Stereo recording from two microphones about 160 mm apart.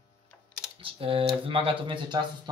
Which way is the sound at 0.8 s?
35° right (ahead or behind).